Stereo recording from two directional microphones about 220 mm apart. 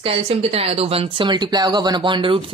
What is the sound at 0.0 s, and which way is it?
Speech, 25° right (ahead or behind).